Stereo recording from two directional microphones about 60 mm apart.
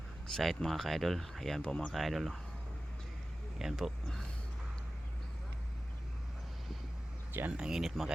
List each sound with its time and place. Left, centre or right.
0.3 s speech: centre
1.6 s speech: centre
1.9 s speech: centre
3.6 s speech: centre
7.5 s speech: centre